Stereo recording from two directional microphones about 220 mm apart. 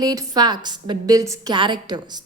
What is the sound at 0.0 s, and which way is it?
A woman's voice, 15° right (ahead or behind).